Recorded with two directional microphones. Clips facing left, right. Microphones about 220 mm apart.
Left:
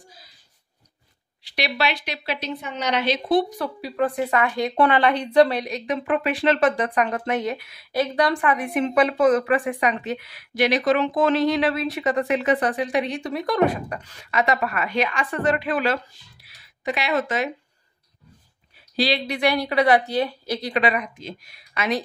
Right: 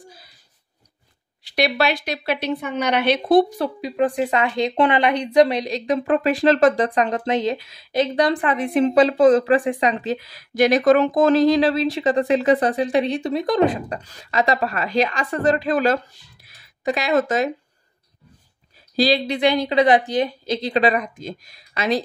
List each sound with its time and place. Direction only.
1.5 s a woman's voice: 50° right (ahead or behind)
3.4 s speech: 25° right (ahead or behind)
5.9 s a woman's voice: 35° right (ahead or behind)
6.8 s a woman's voice: 30° right (ahead or behind)
14.0 s a woman's voice: 35° right (ahead or behind)
16.4 s a sound: 40° right (ahead or behind)
18.9 s a woman's voice: 40° right (ahead or behind)
19.2 s speech: 20° right (ahead or behind)
20.8 s speech: 40° right (ahead or behind)